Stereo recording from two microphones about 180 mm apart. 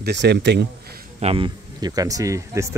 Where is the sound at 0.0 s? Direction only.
70° right (ahead or behind).